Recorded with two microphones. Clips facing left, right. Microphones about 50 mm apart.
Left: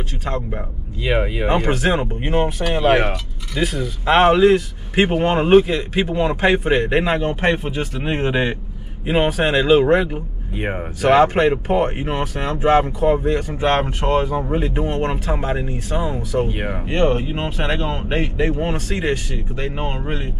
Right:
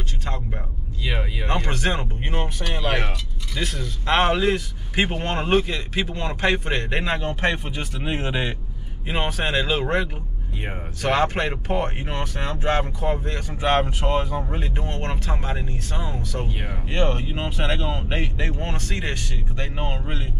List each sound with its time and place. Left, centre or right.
0.2 s speech: centre
1.0 s speech: left
1.5 s speech: centre
10.5 s speech: left
11.0 s speech: centre
16.4 s speech: left
16.9 s speech: centre